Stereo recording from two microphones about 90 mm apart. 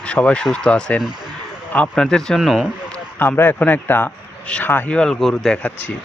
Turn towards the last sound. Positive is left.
turn(degrees=5)  # may be behind; listen again after turning